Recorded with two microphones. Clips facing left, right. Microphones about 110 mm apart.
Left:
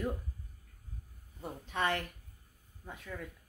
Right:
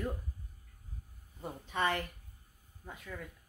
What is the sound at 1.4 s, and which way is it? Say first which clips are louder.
Speech: even; centre (ahead or behind).